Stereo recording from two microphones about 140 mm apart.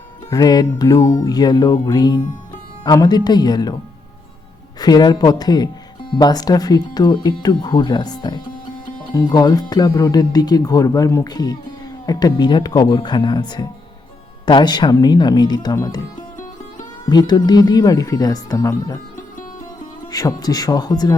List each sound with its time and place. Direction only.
0.3 s speech: 25° left (ahead or behind)
4.8 s speech: 30° left (ahead or behind)
17.1 s speech: 30° left (ahead or behind)
20.1 s speech: 25° left (ahead or behind)